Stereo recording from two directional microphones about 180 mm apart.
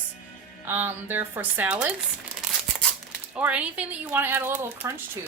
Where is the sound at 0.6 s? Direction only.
10° right (ahead or behind).